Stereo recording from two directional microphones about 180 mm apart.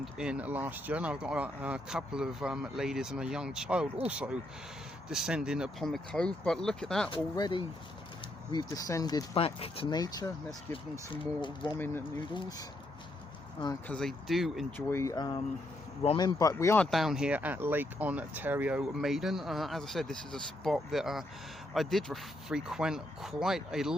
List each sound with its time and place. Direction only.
0.0 s speech: 5° right (ahead or behind)
7.1 s speech: 25° left (ahead or behind)
13.8 s speech: 5° left (ahead or behind)
14.8 s speech: 15° left (ahead or behind); by 23.9 s 5° right (ahead or behind)